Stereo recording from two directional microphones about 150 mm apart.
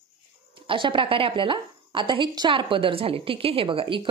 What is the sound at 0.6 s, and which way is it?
A woman's voice, 35° right (ahead or behind).